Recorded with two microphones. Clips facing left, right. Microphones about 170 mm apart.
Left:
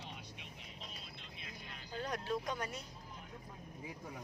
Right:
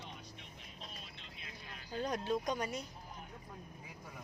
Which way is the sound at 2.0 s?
20° right (ahead or behind).